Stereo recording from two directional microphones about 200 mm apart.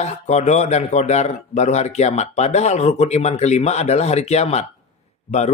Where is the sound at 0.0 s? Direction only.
35° left (ahead or behind).